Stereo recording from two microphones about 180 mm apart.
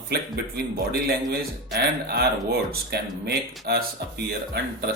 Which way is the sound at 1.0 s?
60° right (ahead or behind).